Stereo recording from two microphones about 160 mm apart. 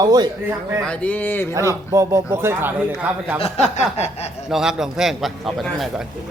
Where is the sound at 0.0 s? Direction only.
25° right (ahead or behind).